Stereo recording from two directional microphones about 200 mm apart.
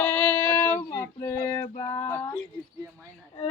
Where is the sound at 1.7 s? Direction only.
15° left (ahead or behind).